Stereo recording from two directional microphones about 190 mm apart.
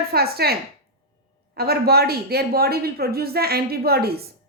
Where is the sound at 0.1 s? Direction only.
55° right (ahead or behind).